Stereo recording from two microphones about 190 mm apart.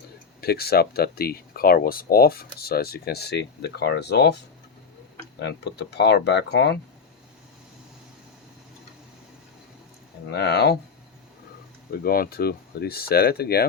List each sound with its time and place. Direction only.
0.4 s speech: 55° left (ahead or behind)
5.4 s speech: 65° left (ahead or behind)
10.3 s speech: 60° left (ahead or behind)
11.9 s speech: 50° left (ahead or behind)